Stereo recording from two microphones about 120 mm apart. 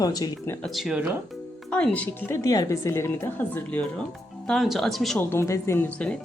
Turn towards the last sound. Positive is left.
turn(degrees=20)  # may be behind; listen again after turning